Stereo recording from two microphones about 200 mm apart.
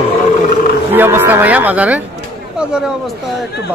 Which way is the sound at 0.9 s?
10° right (ahead or behind).